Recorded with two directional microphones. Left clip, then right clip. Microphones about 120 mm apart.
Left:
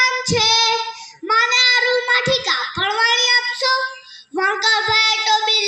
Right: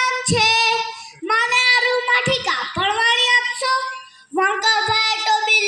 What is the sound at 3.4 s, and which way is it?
Child singing, 35° right (ahead or behind).